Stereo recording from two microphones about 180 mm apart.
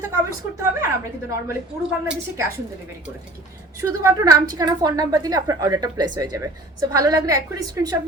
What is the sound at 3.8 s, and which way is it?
A woman's voice, 15° right (ahead or behind).